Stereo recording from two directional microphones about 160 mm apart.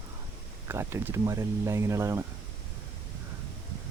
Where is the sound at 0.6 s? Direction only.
15° right (ahead or behind).